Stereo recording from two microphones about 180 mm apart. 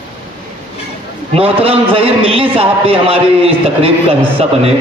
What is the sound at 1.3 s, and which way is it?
A man's voice, 30° right (ahead or behind).